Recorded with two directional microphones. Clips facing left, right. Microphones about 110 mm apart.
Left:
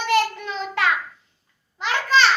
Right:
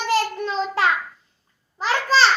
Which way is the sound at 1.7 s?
35° right (ahead or behind).